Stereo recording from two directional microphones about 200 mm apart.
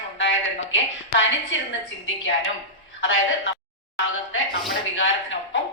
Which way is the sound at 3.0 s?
75° left (ahead or behind).